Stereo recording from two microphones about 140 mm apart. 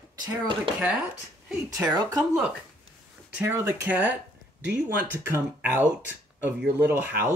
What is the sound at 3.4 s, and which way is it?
Speech, 20° right (ahead or behind).